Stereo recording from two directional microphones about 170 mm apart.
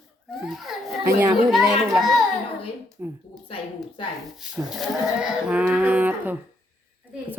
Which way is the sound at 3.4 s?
30° left (ahead or behind).